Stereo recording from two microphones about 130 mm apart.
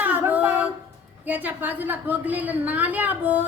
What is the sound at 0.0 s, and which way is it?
Female singing, 15° right (ahead or behind).